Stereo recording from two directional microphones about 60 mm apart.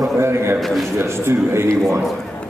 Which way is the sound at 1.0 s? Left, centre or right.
Right.